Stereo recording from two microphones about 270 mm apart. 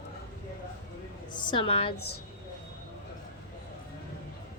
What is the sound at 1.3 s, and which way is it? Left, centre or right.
Speech, centre.